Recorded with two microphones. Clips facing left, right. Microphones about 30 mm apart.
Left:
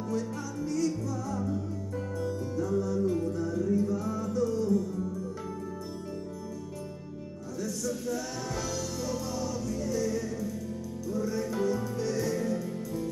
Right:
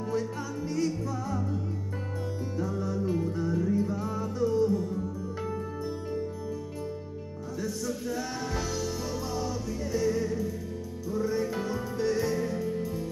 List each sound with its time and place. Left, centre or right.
0.1 s music: right
2.6 s music: right
7.6 s music: right